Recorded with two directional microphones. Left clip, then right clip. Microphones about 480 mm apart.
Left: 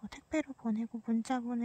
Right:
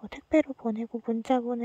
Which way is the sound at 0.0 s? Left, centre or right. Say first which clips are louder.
Right 11 dB; centre.